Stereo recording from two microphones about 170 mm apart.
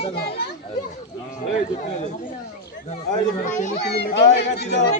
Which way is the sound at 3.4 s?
45° left (ahead or behind).